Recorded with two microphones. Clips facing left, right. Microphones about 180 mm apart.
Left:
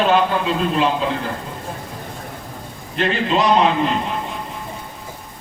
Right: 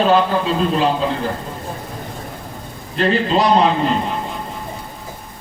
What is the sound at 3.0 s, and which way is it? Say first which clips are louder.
Speech: right 3 dB; 35° right (ahead or behind).